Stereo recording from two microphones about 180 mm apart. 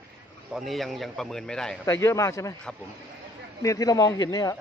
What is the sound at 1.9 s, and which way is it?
Speech, 15° left (ahead or behind).